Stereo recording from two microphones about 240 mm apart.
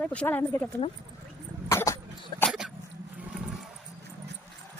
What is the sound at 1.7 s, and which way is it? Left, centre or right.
Cough, centre.